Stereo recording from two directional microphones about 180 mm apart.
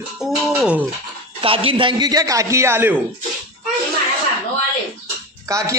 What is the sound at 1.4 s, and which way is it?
Speech, 30° right (ahead or behind).